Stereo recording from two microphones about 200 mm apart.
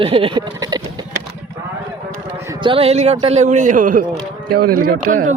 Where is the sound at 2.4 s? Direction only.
25° right (ahead or behind).